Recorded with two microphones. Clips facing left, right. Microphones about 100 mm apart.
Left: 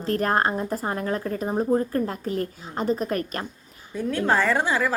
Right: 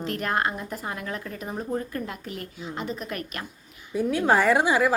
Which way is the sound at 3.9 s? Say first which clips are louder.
Right 1 dB; 10° right (ahead or behind).